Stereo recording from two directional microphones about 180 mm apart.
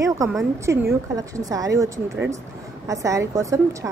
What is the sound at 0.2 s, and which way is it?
A woman's voice, 15° right (ahead or behind).